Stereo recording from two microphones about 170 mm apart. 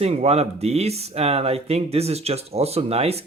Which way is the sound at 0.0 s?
35° right (ahead or behind).